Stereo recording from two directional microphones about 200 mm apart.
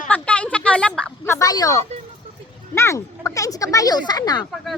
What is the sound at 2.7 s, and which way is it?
Speech, 15° left (ahead or behind).